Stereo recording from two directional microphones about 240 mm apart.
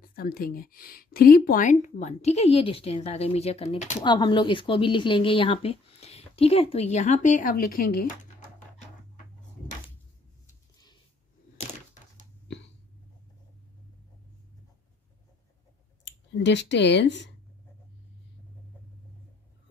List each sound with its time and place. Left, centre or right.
0.0 s a woman's voice: left
16.0 s speech: left